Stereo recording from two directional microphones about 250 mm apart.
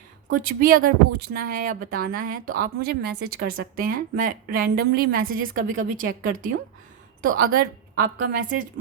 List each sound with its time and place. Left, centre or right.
0.3 s a woman's voice: right